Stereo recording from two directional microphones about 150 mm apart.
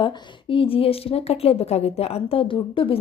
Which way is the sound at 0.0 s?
35° left (ahead or behind).